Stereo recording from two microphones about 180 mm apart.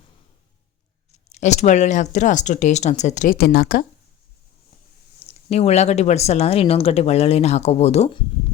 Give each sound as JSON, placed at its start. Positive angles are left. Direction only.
{"t": 1.3, "sound": "speech", "side_deg": 40}
{"t": 3.3, "sound": "speech", "side_deg": 60}
{"t": 5.2, "sound": "speech", "side_deg": 35}